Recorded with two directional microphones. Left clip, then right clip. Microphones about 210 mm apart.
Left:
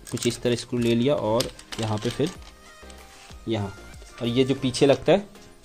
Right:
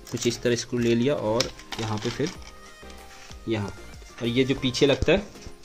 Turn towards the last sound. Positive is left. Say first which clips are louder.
# left 2 dB
turn(degrees=30)  # may be behind; listen again after turning